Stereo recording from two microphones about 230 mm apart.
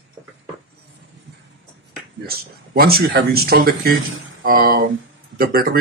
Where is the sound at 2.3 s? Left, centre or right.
Right.